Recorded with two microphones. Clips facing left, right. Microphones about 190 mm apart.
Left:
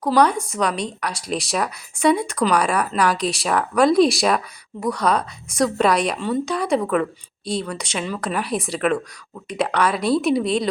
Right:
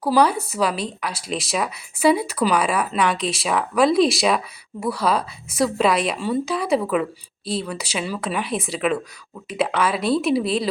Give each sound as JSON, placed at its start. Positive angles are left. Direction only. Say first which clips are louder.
{"t": 0.0, "sound": "speech", "louder": "left 1 dB", "side_deg": -5}